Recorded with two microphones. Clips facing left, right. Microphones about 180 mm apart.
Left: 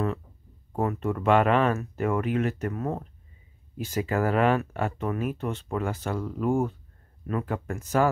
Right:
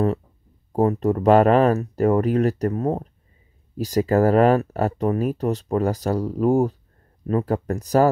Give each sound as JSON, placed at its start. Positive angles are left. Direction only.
{"t": 0.7, "sound": "speech", "side_deg": -35}